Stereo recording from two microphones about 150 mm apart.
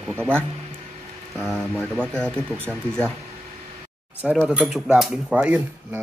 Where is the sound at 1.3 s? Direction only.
Centre (ahead or behind).